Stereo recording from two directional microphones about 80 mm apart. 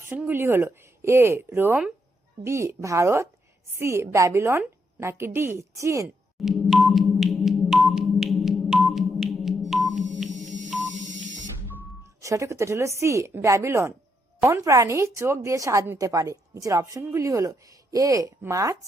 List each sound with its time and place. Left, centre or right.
0.3 s speech: right
6.4 s sonar: centre
12.2 s a woman's voice: right